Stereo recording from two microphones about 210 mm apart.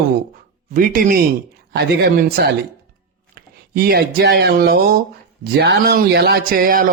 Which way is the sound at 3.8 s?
50° right (ahead or behind).